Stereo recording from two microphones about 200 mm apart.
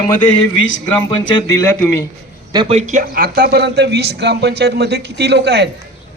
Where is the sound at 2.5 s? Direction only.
25° right (ahead or behind).